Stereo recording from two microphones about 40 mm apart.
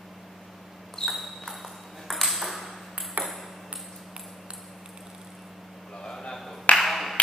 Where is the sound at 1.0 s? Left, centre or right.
Centre.